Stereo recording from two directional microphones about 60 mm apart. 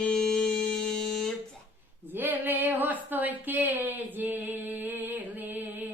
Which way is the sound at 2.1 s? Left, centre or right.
Right.